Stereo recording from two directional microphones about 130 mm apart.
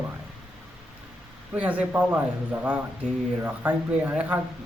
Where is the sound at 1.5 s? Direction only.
10° right (ahead or behind).